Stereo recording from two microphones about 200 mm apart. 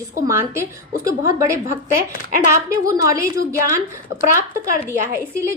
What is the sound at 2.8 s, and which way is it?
Speech, 15° right (ahead or behind).